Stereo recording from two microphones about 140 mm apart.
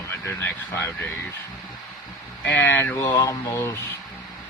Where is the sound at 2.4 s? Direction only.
15° left (ahead or behind).